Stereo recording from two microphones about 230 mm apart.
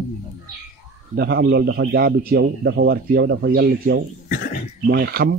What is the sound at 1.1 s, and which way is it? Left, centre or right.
A man's voice, right.